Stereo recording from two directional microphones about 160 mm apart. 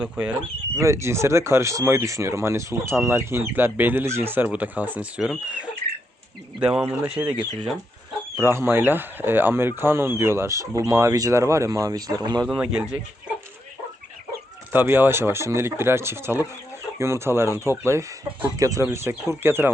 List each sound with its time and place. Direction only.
0.0 s speech: 10° right (ahead or behind)
6.6 s speech: 5° right (ahead or behind); by 12.5 s 25° right (ahead or behind)
12.5 s speech: 5° right (ahead or behind)
14.7 s speech: 15° right (ahead or behind)